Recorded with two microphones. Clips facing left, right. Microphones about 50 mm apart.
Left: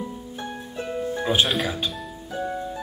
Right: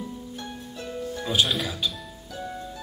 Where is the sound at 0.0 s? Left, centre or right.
Left.